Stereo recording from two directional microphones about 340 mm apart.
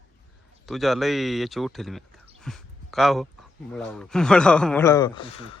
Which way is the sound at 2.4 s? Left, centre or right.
Centre.